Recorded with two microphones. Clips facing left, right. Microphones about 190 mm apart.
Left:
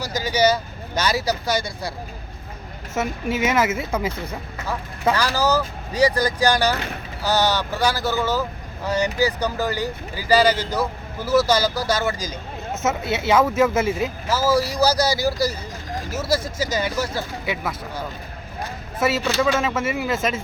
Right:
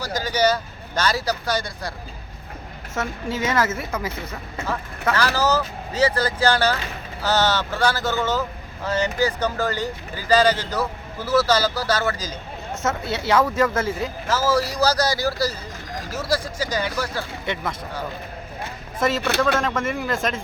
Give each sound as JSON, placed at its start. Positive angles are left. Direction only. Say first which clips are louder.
{"t": 0.0, "sound": "speech", "louder": "left 1 dB", "side_deg": 10}
{"t": 2.9, "sound": "speech", "louder": "left 3 dB", "side_deg": 10}
{"t": 13.1, "sound": "speech", "louder": "left 2 dB", "side_deg": 20}
{"t": 13.3, "sound": "speech", "louder": "left 2 dB", "side_deg": 10}
{"t": 13.7, "sound": "speech", "louder": "left 3 dB", "side_deg": 20}
{"t": 14.3, "sound": "speech", "louder": "left 1 dB", "side_deg": 10}
{"t": 16.4, "sound": "speech", "louder": "left 2 dB", "side_deg": -15}
{"t": 16.7, "sound": "speech", "louder": "left 1 dB", "side_deg": 15}